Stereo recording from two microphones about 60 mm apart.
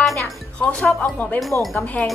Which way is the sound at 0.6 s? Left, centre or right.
Centre.